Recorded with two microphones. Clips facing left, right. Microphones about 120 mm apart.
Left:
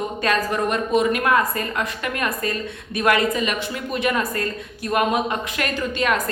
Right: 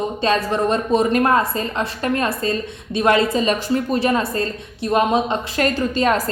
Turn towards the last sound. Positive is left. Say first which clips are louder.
# right 4 dB
turn(degrees=-35)  # may be behind; listen again after turning